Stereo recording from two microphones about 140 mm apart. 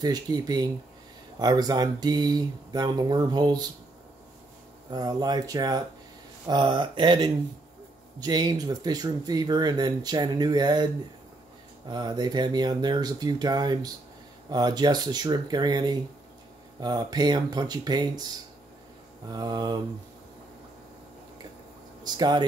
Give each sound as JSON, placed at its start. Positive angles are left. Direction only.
{"t": 0.0, "sound": "speech", "side_deg": -30}
{"t": 4.9, "sound": "speech", "side_deg": -30}
{"t": 11.9, "sound": "speech", "side_deg": -30}
{"t": 22.0, "sound": "speech", "side_deg": -30}